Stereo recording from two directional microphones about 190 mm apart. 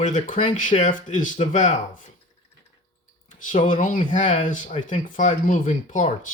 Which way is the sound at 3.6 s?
45° left (ahead or behind).